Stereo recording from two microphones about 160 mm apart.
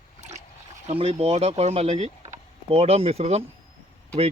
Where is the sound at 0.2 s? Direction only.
45° right (ahead or behind).